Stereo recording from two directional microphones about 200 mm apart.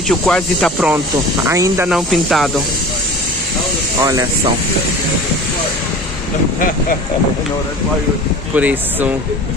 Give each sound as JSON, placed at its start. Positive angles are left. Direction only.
{"t": 0.1, "sound": "speech", "side_deg": 0}
{"t": 1.5, "sound": "speech", "side_deg": -15}
{"t": 1.9, "sound": "speech", "side_deg": 0}
{"t": 4.0, "sound": "speech", "side_deg": -20}
{"t": 8.5, "sound": "speech", "side_deg": -10}